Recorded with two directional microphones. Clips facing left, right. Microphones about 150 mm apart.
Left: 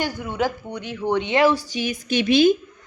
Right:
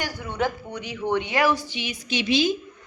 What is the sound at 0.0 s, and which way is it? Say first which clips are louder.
Speech: left 3 dB; 15° left (ahead or behind).